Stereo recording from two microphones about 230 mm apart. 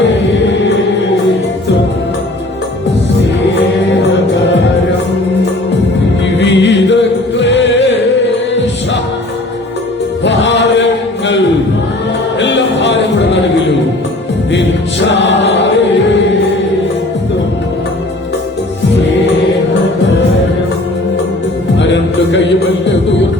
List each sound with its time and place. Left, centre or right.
6.4 s music: left
10.2 s music: left
12.4 s music: left
14.5 s music: left
21.8 s music: left